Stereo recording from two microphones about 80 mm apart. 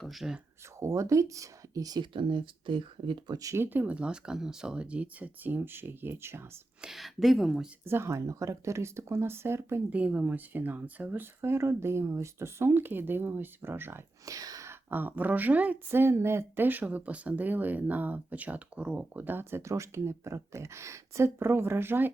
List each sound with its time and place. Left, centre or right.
0.0 s speech: centre
0.8 s speech: right
2.0 s speech: right
3.3 s speech: right
3.6 s speech: right
6.8 s speech: centre
7.9 s speech: right
9.9 s speech: centre
14.3 s speech: right
14.7 s speech: right